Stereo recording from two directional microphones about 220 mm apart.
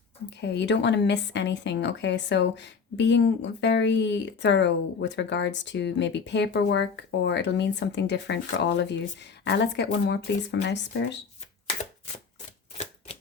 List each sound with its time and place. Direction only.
0.4 s a woman's voice: 50° left (ahead or behind)
12.7 s typewriter: 25° left (ahead or behind)